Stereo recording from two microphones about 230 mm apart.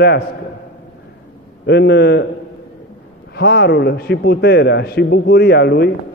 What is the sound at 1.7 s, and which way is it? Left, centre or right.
Speech, left.